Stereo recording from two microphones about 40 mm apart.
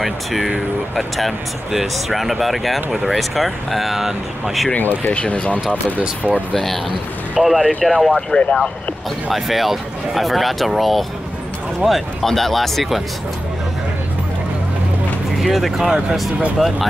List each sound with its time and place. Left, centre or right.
0.0 s speech: centre
4.7 s speech: left
5.1 s speech: left
5.9 s speech: right
7.4 s speech: centre
8.3 s speech: left
9.3 s speech: centre
15.3 s speech: centre